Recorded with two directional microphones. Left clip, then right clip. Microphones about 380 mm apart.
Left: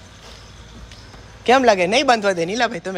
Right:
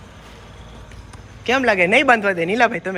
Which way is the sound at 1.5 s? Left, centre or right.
Centre.